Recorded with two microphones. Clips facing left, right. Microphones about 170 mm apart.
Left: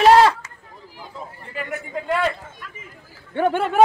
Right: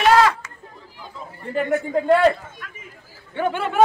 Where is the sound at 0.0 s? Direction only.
35° left (ahead or behind).